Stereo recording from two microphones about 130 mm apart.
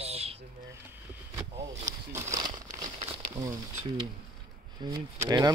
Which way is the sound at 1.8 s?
25° right (ahead or behind).